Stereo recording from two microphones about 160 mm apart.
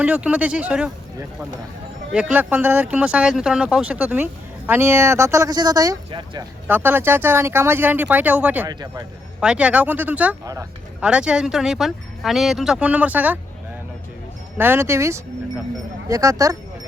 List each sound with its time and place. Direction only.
0.0 s speech: 5° right (ahead or behind)
2.1 s speech: 5° right (ahead or behind); by 6.4 s 30° right (ahead or behind)
6.7 s speech: 10° right (ahead or behind)
8.6 s speech: 25° right (ahead or behind)
9.4 s speech: 5° right (ahead or behind)
10.4 s speech: 20° right (ahead or behind)
11.0 s speech: 5° right (ahead or behind)
14.6 s speech: 15° right (ahead or behind)